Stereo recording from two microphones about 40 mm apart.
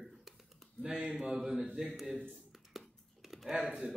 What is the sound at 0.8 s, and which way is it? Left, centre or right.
Speech, right.